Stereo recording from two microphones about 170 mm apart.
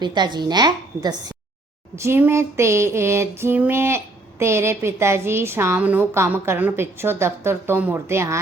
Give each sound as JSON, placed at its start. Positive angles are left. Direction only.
{"t": 0.0, "sound": "a woman's voice", "side_deg": -25}
{"t": 2.0, "sound": "female singing", "side_deg": -15}